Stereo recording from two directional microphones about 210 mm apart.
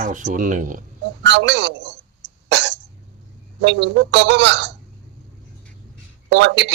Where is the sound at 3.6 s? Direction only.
55° right (ahead or behind).